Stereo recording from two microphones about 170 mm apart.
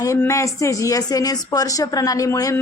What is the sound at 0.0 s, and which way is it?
A woman's voice, 20° left (ahead or behind).